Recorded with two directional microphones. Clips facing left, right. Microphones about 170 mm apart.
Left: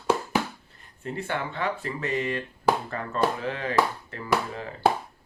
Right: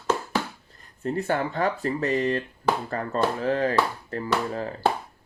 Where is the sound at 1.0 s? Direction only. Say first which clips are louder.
Right 5 dB; 40° right (ahead or behind).